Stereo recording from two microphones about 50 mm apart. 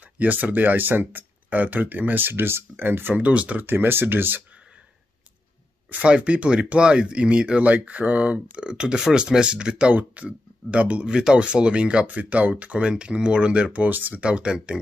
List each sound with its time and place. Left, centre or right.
0.2 s speech: right
3.2 s speech: right
3.6 s speech: right
5.9 s speech: right
9.9 s speech: right
12.8 s speech: centre
13.8 s speech: right
14.2 s speech: centre